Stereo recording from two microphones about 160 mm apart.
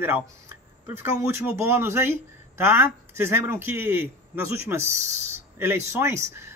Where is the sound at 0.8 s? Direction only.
15° right (ahead or behind).